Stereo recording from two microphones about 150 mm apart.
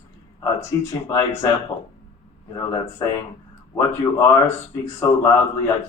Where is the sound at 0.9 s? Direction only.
20° left (ahead or behind).